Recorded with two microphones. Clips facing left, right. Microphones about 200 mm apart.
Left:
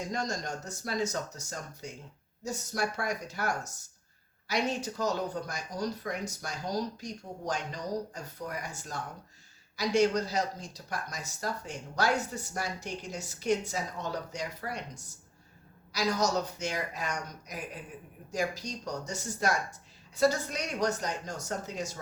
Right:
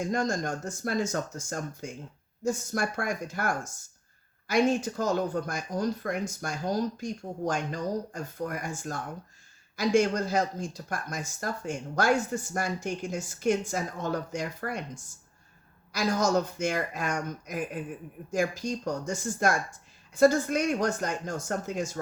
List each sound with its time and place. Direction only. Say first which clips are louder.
0.0 s speech: right 6 dB; 50° right (ahead or behind)